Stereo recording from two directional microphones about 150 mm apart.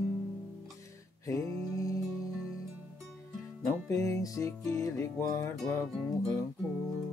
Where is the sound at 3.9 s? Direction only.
20° left (ahead or behind).